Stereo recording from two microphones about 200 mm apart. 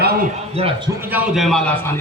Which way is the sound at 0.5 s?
30° right (ahead or behind).